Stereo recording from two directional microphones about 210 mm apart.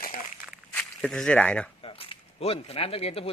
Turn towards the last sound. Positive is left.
turn(degrees=25)  # may be behind; listen again after turning